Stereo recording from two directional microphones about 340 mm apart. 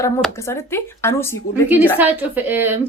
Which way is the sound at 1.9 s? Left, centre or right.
Centre.